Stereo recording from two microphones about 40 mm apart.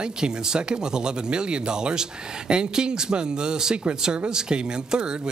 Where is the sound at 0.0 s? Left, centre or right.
Right.